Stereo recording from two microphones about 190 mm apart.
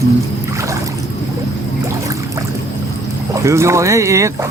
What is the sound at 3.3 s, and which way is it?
Speech, 15° right (ahead or behind).